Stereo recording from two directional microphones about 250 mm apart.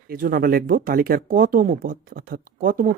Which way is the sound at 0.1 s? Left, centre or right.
Right.